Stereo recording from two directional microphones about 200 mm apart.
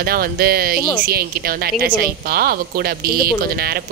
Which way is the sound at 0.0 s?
50° right (ahead or behind).